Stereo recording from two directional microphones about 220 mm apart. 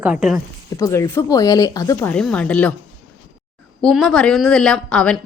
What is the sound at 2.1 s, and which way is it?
Speech, 5° left (ahead or behind).